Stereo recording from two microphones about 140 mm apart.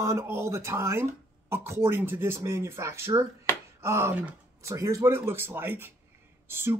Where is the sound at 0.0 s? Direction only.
20° right (ahead or behind).